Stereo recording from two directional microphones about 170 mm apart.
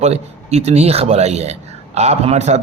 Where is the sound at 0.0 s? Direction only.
40° right (ahead or behind).